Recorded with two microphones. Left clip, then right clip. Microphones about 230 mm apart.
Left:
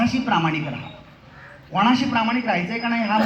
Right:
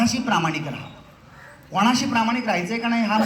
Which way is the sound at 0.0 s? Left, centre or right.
Right.